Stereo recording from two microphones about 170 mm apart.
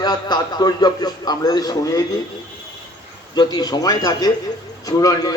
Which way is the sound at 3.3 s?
25° left (ahead or behind).